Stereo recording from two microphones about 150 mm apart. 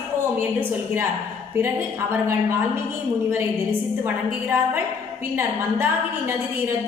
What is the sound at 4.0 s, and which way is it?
A woman's voice, 15° right (ahead or behind).